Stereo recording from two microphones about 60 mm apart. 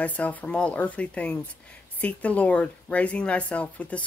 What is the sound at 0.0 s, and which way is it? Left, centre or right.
Speech, left.